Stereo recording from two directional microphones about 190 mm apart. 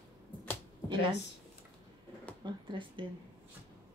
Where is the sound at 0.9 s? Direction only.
25° right (ahead or behind).